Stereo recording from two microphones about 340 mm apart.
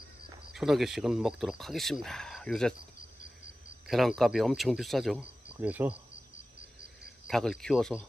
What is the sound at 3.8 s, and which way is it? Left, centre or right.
Speech, centre.